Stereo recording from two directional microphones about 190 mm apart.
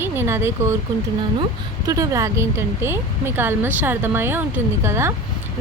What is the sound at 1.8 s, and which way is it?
Speech, 20° right (ahead or behind).